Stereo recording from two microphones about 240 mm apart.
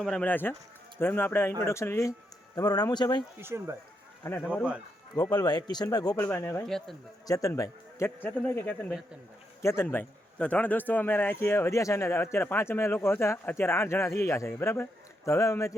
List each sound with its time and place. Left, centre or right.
0.0 s a man's voice: centre
3.3 s speech: centre
4.2 s a man's voice: centre
7.3 s a man's voice: centre